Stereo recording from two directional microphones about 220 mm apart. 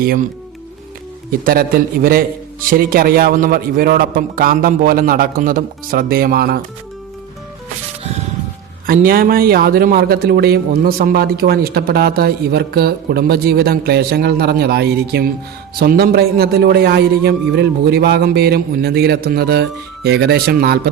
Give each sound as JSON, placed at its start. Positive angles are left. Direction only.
{"t": 0.0, "sound": "speech", "side_deg": -40}
{"t": 1.3, "sound": "speech", "side_deg": -40}
{"t": 8.9, "sound": "speech", "side_deg": -40}